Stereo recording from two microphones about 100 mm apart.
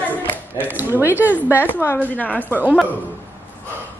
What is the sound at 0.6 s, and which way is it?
Speech, 20° right (ahead or behind).